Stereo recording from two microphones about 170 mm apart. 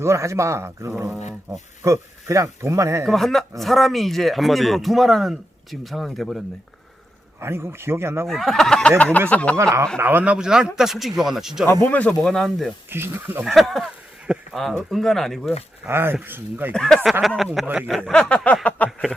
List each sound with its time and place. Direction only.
0.0 s speech: 15° right (ahead or behind)
3.1 s speech: centre (ahead or behind)
7.3 s speech: 15° right (ahead or behind)
8.3 s speech: centre (ahead or behind)
9.6 s speech: 15° right (ahead or behind)
11.6 s speech: 15° left (ahead or behind)
12.9 s speech: 10° right (ahead or behind)
13.4 s speech: centre (ahead or behind)
15.9 s speech: 15° right (ahead or behind)
16.7 s speech: 5° left (ahead or behind)